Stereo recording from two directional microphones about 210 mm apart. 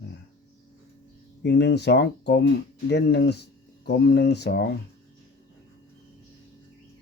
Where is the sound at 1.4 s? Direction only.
55° left (ahead or behind).